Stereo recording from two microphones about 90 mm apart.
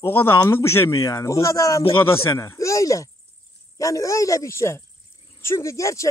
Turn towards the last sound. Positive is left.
turn(degrees=35)  # may be behind; listen again after turning